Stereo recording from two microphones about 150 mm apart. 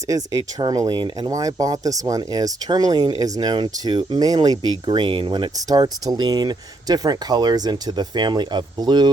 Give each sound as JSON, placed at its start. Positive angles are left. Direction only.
{"t": 0.6, "sound": "speech", "side_deg": -30}